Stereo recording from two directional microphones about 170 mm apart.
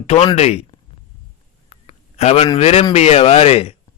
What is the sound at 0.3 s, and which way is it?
Speech, 40° left (ahead or behind).